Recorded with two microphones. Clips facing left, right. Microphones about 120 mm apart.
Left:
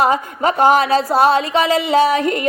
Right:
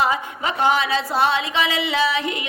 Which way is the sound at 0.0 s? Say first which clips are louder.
Left 6 dB; 45° left (ahead or behind).